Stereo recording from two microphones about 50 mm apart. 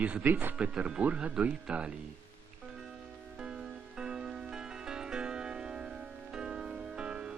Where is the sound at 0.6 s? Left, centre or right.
Centre.